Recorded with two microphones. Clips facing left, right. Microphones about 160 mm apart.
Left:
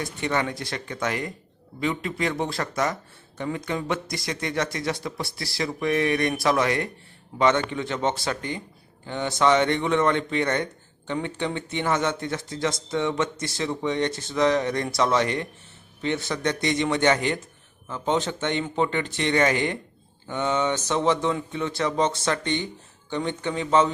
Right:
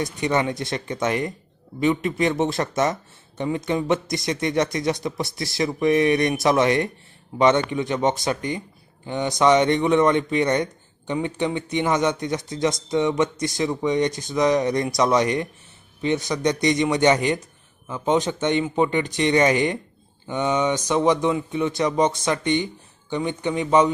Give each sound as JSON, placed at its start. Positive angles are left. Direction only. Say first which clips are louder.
{"t": 0.0, "sound": "speech", "louder": "right 4 dB", "side_deg": -20}